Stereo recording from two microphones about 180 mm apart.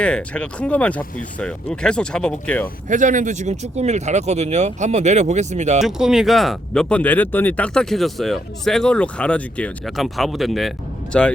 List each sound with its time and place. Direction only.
0.0 s speech: 5° left (ahead or behind)
2.9 s speech: 45° right (ahead or behind)
5.8 s speech: 5° right (ahead or behind)